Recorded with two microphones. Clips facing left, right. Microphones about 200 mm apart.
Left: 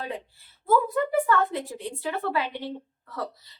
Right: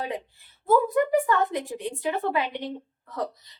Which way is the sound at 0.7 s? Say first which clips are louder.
Right 2 dB; 15° right (ahead or behind).